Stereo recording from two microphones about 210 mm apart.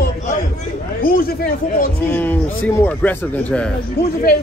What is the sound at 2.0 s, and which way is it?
A man's voice, 10° left (ahead or behind).